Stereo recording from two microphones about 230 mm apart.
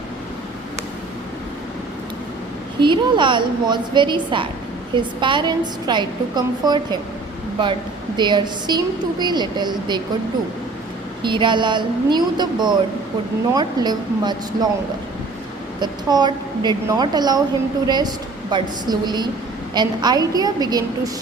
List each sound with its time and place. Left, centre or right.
2.8 s a woman's voice: centre
11.2 s a woman's voice: right
15.8 s a woman's voice: centre